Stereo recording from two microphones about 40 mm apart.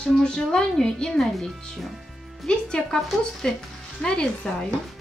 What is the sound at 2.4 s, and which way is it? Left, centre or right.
A woman's voice, centre.